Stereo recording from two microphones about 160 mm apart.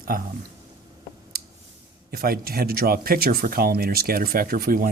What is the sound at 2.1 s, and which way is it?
Speech, 70° right (ahead or behind).